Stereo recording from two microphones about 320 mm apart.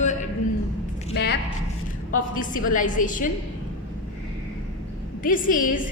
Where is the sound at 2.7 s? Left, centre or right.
Left.